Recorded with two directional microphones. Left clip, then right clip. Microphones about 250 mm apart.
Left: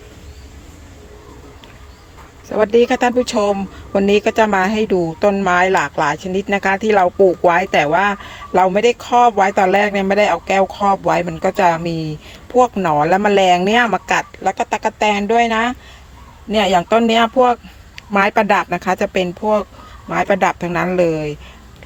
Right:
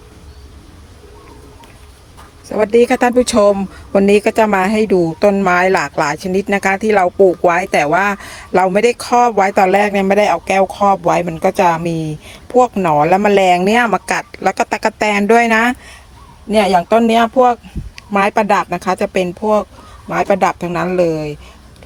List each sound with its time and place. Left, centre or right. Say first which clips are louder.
2.5 s speech: right 2 dB; centre
7.7 s speech: right 1 dB; centre
16.5 s speech: right 2 dB; centre